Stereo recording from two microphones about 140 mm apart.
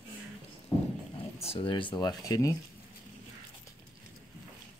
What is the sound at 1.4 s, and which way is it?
Speech, 45° left (ahead or behind).